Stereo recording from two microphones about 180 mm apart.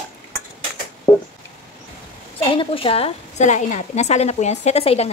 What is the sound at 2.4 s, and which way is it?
A woman's voice, 30° left (ahead or behind).